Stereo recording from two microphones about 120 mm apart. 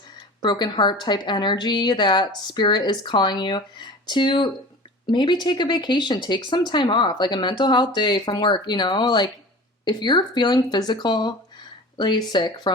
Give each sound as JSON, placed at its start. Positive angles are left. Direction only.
{"t": 0.4, "sound": "speech", "side_deg": 35}